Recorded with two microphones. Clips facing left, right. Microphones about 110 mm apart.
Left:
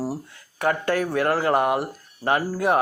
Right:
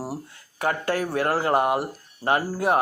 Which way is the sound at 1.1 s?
30° right (ahead or behind).